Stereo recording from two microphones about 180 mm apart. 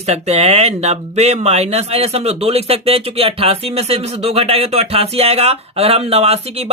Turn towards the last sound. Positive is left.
turn(degrees=-35)  # may be behind; listen again after turning